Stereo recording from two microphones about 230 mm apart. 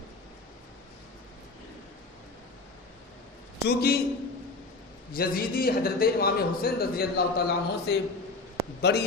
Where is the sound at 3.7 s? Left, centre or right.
Left.